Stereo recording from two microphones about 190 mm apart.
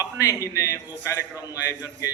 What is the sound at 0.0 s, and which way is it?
A man's voice, 15° left (ahead or behind).